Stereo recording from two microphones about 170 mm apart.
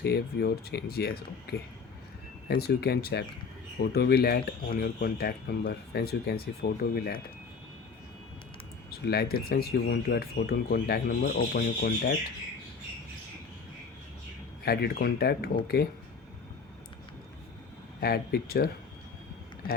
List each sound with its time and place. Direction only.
0.0 s speech: 70° left (ahead or behind)
8.9 s speech: 65° left (ahead or behind)
14.6 s speech: 65° left (ahead or behind)
18.0 s speech: 65° left (ahead or behind)